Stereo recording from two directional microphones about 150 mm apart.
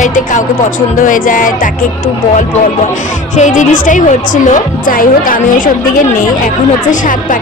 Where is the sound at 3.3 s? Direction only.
55° left (ahead or behind).